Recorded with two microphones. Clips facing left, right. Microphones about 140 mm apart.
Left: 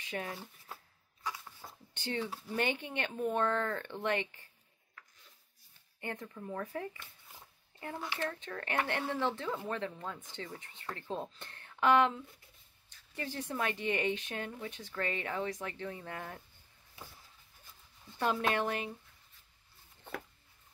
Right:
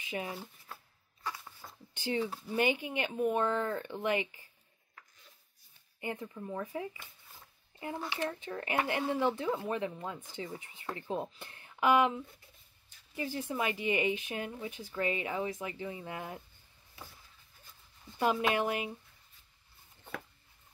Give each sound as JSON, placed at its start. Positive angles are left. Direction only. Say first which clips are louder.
{"t": 0.0, "sound": "speech", "louder": "right 2 dB", "side_deg": -5}
{"t": 1.6, "sound": "a sound", "louder": "left 2 dB", "side_deg": 20}
{"t": 2.0, "sound": "speech", "louder": "right 4 dB", "side_deg": -10}
{"t": 5.9, "sound": "speech", "louder": "right 3 dB", "side_deg": -10}
{"t": 8.1, "sound": "speech", "louder": "even", "side_deg": -15}
{"t": 18.2, "sound": "speech", "louder": "right 2 dB", "side_deg": -5}